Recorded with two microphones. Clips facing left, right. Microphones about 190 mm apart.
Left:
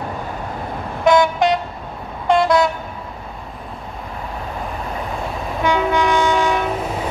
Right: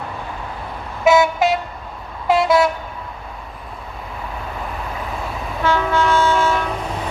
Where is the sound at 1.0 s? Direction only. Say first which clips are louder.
Even; 5° right (ahead or behind).